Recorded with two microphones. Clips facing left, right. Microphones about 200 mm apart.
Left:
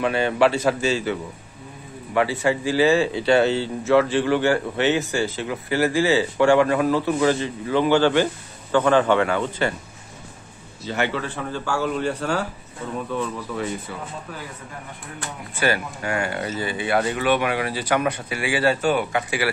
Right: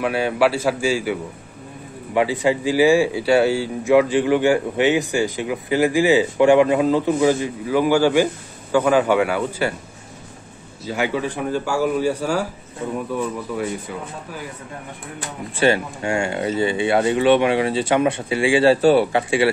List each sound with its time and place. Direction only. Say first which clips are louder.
0.0 s speech: right 1 dB; 5° right (ahead or behind)
10.9 s speech: right 3 dB; 10° right (ahead or behind)
15.5 s speech: right 5 dB; 25° right (ahead or behind)